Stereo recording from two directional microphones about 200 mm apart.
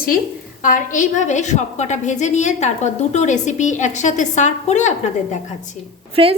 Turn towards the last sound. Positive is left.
turn(degrees=-25)  # may be behind; listen again after turning